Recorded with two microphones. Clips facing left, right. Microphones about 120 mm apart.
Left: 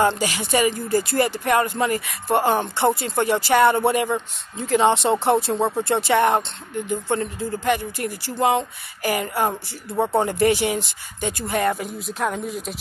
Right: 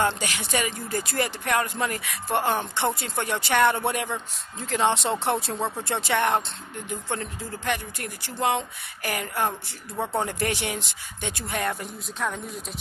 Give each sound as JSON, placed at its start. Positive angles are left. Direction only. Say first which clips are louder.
{"t": 0.0, "sound": "speech", "louder": "left 5 dB", "side_deg": 0}
{"t": 9.5, "sound": "speech", "louder": "left 6 dB", "side_deg": 25}
{"t": 10.1, "sound": "speech", "louder": "left 8 dB", "side_deg": 0}